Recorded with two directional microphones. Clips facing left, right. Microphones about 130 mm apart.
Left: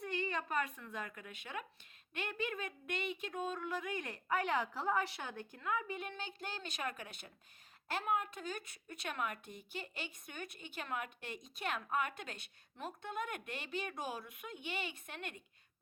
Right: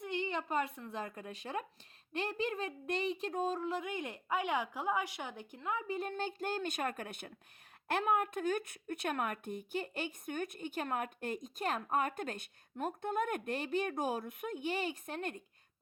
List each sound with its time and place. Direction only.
0.0 s a woman's voice: 20° right (ahead or behind); by 15.4 s 40° right (ahead or behind)